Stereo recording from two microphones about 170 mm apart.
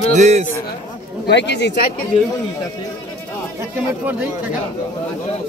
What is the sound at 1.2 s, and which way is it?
Speech, 90° left.